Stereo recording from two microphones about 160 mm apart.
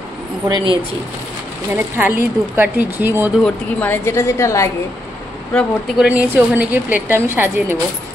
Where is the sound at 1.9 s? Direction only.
10° right (ahead or behind).